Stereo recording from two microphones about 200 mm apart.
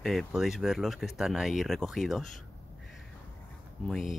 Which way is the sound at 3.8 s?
Centre (ahead or behind).